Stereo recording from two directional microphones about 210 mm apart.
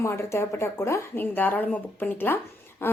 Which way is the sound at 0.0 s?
15° left (ahead or behind).